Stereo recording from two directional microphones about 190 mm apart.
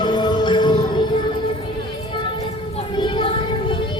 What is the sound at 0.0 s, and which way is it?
Music, 25° left (ahead or behind).